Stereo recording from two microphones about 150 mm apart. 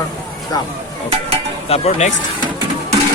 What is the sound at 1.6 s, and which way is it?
Speech, 45° left (ahead or behind).